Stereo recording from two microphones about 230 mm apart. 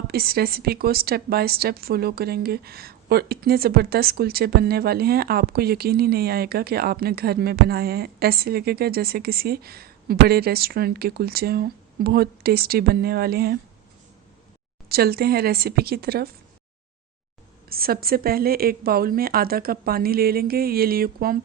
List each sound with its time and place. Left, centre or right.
0.1 s a woman's voice: right
14.8 s a woman's voice: right
17.7 s a woman's voice: right